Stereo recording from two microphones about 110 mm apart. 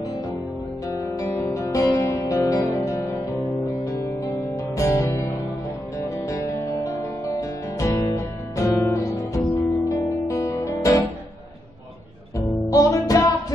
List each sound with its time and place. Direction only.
0.8 s music: 30° left (ahead or behind)
12.4 s music: 30° left (ahead or behind)